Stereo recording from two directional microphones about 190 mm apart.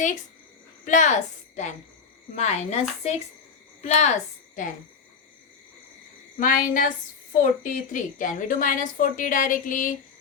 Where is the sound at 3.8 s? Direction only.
35° left (ahead or behind).